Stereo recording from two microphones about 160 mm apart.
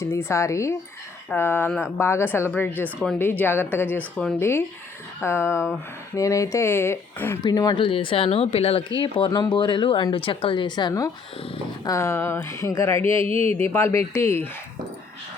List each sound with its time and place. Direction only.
0.0 s speech: 15° left (ahead or behind)
7.4 s speech: 25° left (ahead or behind)
13.2 s speech: 40° right (ahead or behind)
13.6 s speech: 15° left (ahead or behind)